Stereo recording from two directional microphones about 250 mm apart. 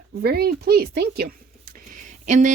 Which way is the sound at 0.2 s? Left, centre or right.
Right.